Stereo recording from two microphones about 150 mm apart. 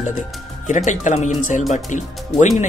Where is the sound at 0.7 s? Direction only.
55° left (ahead or behind).